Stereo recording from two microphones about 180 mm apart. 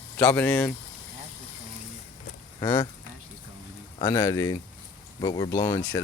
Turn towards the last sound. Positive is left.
turn(degrees=15)  # may be behind; listen again after turning